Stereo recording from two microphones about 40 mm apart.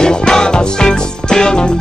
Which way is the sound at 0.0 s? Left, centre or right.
Centre.